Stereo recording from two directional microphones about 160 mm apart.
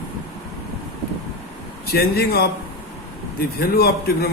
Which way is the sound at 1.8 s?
80° left.